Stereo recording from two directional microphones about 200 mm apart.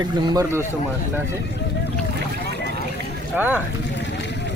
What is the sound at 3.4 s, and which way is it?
Speech, 10° right (ahead or behind).